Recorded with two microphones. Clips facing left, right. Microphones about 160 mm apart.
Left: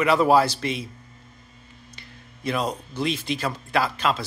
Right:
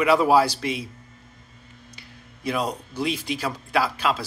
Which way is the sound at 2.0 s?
10° right (ahead or behind).